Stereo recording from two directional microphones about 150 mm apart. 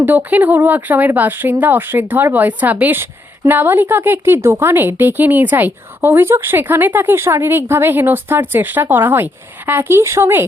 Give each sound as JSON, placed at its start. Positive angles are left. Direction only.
{"t": 0.0, "sound": "speech", "side_deg": -10}